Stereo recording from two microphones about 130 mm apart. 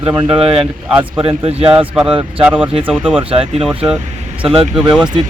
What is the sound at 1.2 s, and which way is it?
Speech, 50° right (ahead or behind).